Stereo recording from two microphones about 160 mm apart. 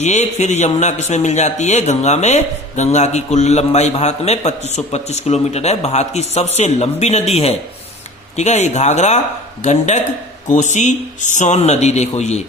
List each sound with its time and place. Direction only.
0.0 s a man's voice: 45° left (ahead or behind)